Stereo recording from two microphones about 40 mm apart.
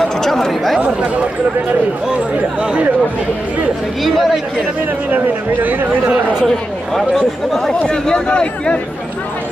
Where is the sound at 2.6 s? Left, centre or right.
Right.